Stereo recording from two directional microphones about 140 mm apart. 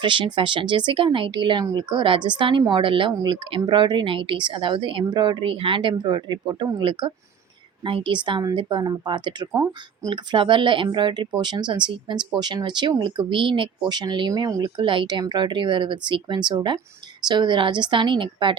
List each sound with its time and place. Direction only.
0.0 s speech: 35° right (ahead or behind)
10.3 s speech: 35° right (ahead or behind)